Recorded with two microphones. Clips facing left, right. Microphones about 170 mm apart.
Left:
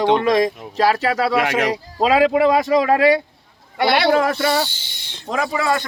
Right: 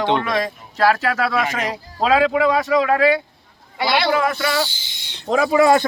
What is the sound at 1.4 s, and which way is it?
Speech, 70° left (ahead or behind).